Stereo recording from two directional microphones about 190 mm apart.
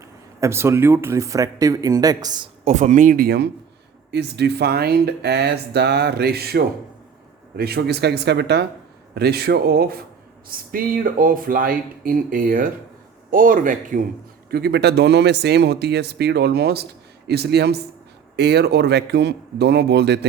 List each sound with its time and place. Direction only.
0.3 s speech: 15° right (ahead or behind)
2.6 s speech: 40° right (ahead or behind)
14.5 s speech: 60° right (ahead or behind)